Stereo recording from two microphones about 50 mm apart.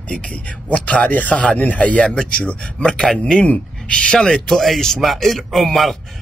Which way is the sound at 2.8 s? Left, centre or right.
Centre.